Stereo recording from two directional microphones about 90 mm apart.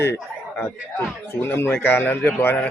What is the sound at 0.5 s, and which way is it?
A man's voice, 25° left (ahead or behind).